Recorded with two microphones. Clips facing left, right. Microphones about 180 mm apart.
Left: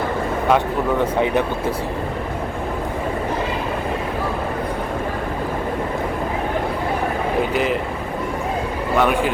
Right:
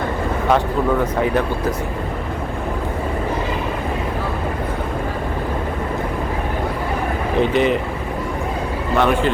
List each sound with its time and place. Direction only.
1.2 s speech: 20° left (ahead or behind)
7.5 s speech: 5° left (ahead or behind)
9.0 s speech: 10° left (ahead or behind)